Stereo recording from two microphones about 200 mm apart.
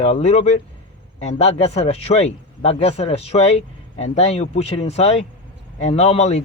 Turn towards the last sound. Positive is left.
turn(degrees=35)  # may be behind; listen again after turning